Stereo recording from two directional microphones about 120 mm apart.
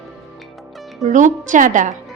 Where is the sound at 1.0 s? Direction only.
90° right.